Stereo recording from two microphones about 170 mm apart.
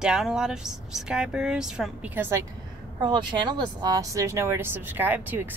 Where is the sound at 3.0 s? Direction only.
25° right (ahead or behind); by 5.5 s 10° right (ahead or behind).